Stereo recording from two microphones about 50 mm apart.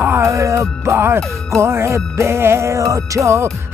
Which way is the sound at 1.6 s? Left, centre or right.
Right.